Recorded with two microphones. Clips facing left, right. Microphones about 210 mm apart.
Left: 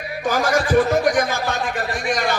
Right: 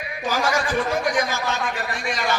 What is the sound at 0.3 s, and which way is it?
A man's voice, 50° left (ahead or behind).